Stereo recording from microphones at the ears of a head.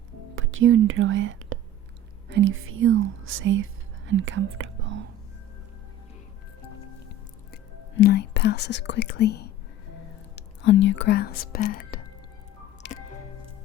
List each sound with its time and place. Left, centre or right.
0.3 s speech: right
7.9 s speech: left